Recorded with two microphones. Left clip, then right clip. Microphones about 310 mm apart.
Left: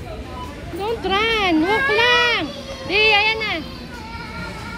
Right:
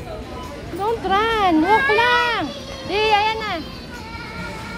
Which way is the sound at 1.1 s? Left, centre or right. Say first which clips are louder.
Even; centre.